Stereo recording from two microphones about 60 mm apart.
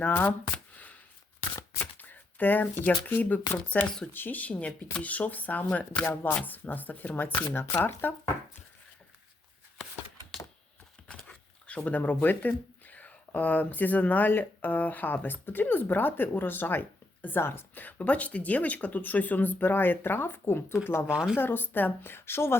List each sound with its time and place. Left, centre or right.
0.1 s shuffling cards: left
1.8 s a sound: left
3.1 s speech: left
3.8 s speech: centre
4.1 s a woman's voice: left
4.5 s speech: centre
6.3 s a woman's voice: left
11.1 s a woman's voice: centre; by 21.1 s left
21.1 s speech: centre
21.3 s a woman's voice: left